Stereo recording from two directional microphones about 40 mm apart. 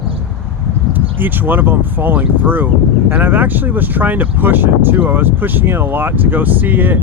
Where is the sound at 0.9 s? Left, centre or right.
Right.